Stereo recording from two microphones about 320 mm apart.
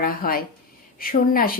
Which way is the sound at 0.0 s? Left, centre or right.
Left.